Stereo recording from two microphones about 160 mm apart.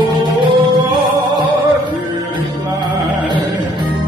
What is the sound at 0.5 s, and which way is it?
Music, 25° right (ahead or behind).